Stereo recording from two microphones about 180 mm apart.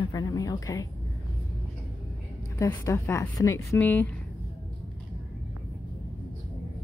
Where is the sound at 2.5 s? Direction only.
15° left (ahead or behind).